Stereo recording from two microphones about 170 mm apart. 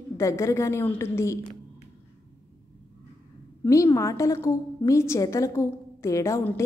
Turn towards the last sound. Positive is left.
turn(degrees=15)  # may be behind; listen again after turning